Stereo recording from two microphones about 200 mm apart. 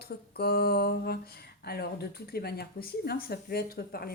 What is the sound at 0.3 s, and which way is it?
Speech, 50° left (ahead or behind).